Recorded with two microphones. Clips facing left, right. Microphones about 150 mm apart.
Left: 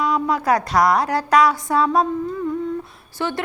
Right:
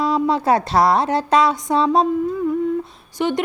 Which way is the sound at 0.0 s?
30° right (ahead or behind).